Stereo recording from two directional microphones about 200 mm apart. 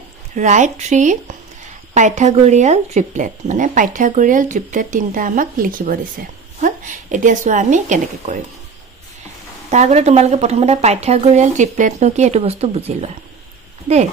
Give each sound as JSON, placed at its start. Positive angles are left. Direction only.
{"t": 0.4, "sound": "speech", "side_deg": -35}
{"t": 9.7, "sound": "speech", "side_deg": -35}